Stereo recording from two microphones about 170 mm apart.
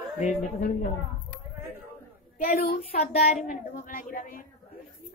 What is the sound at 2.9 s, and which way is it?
A woman's voice, 40° left (ahead or behind).